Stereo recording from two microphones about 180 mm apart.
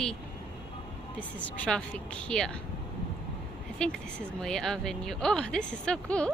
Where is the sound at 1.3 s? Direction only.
5° left (ahead or behind).